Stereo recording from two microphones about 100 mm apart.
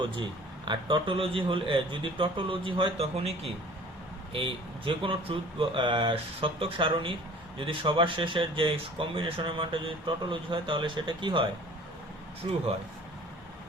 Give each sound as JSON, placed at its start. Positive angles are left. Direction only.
{"t": 0.0, "sound": "speech", "side_deg": -50}
{"t": 4.3, "sound": "speech", "side_deg": -60}